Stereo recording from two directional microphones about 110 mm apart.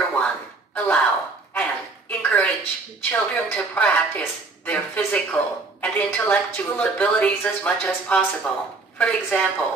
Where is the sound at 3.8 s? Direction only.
10° left (ahead or behind).